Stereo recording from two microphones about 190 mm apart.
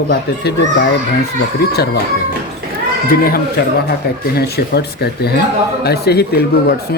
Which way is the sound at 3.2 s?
50° left (ahead or behind).